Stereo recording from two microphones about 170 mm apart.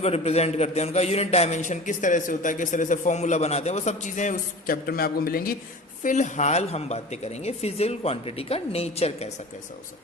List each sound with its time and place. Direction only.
0.0 s a man's voice: 40° left (ahead or behind); by 5.5 s 60° left (ahead or behind)
6.0 s a woman's voice: 45° left (ahead or behind)